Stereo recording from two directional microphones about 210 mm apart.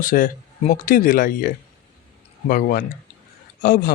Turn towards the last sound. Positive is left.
turn(degrees=40)  # may be behind; listen again after turning